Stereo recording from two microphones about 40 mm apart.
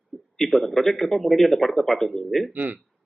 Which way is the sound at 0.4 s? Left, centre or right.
Centre.